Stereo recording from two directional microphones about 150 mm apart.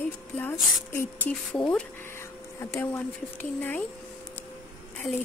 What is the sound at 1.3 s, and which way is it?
Speech, 5° left (ahead or behind).